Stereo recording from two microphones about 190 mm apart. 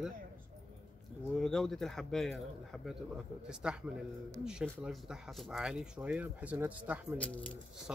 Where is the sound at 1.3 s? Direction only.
Centre (ahead or behind).